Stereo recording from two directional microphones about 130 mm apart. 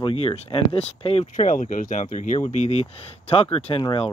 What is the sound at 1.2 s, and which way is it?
Speech, 80° left.